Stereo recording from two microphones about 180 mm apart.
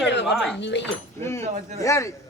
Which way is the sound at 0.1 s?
75° left (ahead or behind).